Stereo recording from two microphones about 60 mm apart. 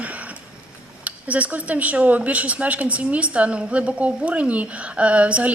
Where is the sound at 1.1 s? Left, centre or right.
Right.